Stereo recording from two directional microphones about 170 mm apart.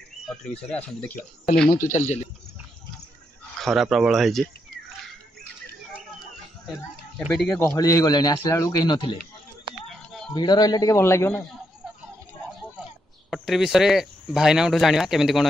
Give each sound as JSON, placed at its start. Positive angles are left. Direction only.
{"t": 0.3, "sound": "speech", "side_deg": 5}
{"t": 1.7, "sound": "speech", "side_deg": 50}
{"t": 3.6, "sound": "speech", "side_deg": 0}
{"t": 7.2, "sound": "speech", "side_deg": 5}
{"t": 7.6, "sound": "a man's voice", "side_deg": 20}
{"t": 9.8, "sound": "a sound", "side_deg": 0}
{"t": 10.3, "sound": "a man's voice", "side_deg": 25}
{"t": 13.3, "sound": "speech", "side_deg": 0}